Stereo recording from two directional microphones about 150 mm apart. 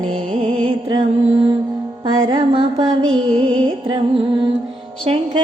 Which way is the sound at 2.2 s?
35° right (ahead or behind).